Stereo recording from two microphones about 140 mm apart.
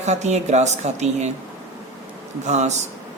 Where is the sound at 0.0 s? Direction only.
55° right (ahead or behind).